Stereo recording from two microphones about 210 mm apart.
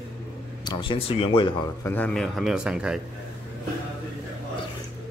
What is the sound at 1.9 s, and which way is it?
A man's voice, 5° left (ahead or behind).